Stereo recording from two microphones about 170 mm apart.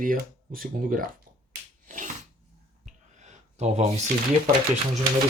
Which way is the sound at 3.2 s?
40° right (ahead or behind).